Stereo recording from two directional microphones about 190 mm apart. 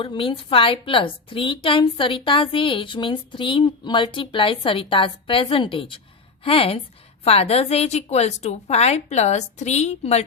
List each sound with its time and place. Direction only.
0.0 s a woman's voice: 25° left (ahead or behind)